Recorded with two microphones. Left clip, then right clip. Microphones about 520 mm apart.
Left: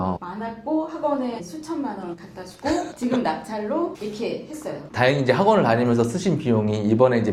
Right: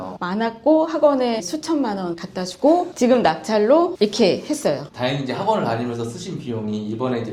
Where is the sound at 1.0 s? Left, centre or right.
Right.